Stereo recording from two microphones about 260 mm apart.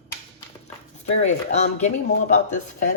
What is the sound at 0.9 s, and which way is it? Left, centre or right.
Speech, left.